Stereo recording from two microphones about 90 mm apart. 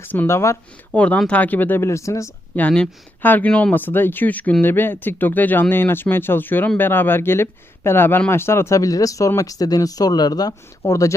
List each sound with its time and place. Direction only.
0.0 s speech: 25° left (ahead or behind)
0.9 s speech: 15° left (ahead or behind); by 2.3 s 35° left (ahead or behind)
2.6 s speech: 10° left (ahead or behind); by 11.1 s 40° left (ahead or behind)